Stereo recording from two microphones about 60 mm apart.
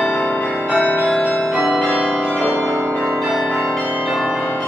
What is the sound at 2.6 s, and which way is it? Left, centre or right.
Change ringing, right.